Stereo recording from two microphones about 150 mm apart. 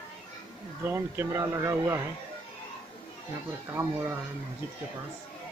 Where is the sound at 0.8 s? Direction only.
15° right (ahead or behind).